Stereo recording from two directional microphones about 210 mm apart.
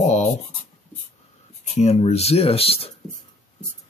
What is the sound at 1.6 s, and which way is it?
Speech, 30° left (ahead or behind).